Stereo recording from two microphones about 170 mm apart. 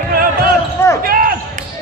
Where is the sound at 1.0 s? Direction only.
55° right (ahead or behind).